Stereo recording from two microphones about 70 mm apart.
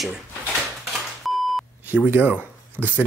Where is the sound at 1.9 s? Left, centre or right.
Right.